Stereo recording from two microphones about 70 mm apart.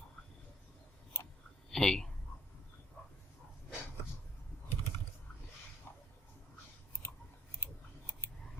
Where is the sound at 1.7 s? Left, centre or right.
Centre.